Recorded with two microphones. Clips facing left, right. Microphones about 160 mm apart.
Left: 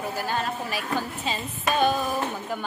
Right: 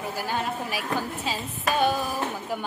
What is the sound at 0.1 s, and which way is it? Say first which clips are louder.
A woman's voice: left 1 dB; 10° right (ahead or behind).